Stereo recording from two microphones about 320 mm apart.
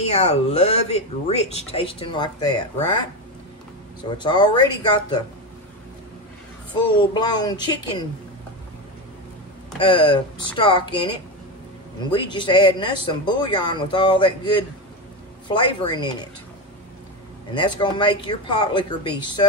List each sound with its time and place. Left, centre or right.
0.0 s speech: centre
4.2 s speech: centre
7.0 s speech: centre
9.8 s speech: centre
17.6 s speech: centre